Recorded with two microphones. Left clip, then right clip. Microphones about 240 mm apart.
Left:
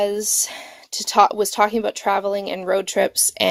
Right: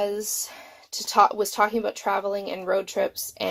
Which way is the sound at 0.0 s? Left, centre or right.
Left.